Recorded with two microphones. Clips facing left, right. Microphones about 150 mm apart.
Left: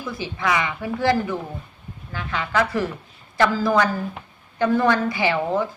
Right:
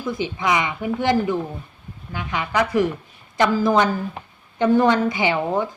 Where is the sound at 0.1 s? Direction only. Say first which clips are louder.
Right 2 dB; 20° right (ahead or behind).